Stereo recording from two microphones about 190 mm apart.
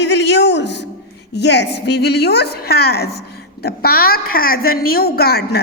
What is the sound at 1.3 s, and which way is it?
A woman's voice, 65° left (ahead or behind).